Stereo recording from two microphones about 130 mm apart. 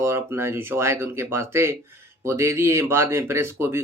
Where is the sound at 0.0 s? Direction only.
20° right (ahead or behind).